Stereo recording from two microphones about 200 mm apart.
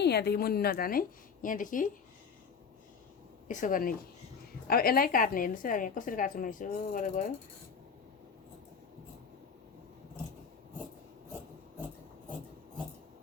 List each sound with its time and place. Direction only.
0.0 s a woman's voice: 55° left (ahead or behind)
3.5 s a woman's voice: 40° left (ahead or behind)